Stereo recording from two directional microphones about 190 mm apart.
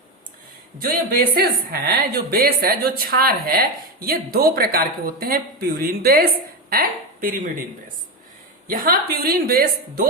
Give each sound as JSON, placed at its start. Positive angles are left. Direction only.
{"t": 1.1, "sound": "a woman's voice", "side_deg": -55}
{"t": 8.6, "sound": "a woman's voice", "side_deg": -50}